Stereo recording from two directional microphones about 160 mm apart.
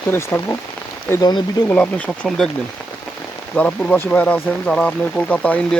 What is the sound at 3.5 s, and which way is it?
Speech, 10° left (ahead or behind).